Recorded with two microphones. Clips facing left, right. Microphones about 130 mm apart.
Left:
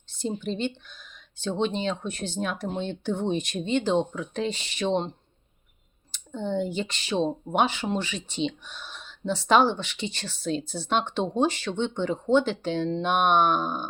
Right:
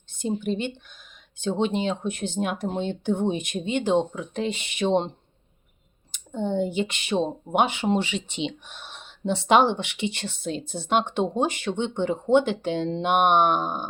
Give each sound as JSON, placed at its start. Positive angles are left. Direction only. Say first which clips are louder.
{"t": 0.1, "sound": "speech", "louder": "right 3 dB", "side_deg": -15}
{"t": 4.4, "sound": "speech", "louder": "right 1 dB", "side_deg": -60}
{"t": 4.8, "sound": "speech", "louder": "right 3 dB", "side_deg": -20}
{"t": 6.3, "sound": "speech", "louder": "right 3 dB", "side_deg": -20}
{"t": 6.8, "sound": "speech", "louder": "right 4 dB", "side_deg": -60}
{"t": 7.5, "sound": "speech", "louder": "right 2 dB", "side_deg": -15}
{"t": 8.6, "sound": "a sound", "louder": "left 1 dB", "side_deg": -65}
{"t": 9.5, "sound": "speech", "louder": "right 2 dB", "side_deg": -20}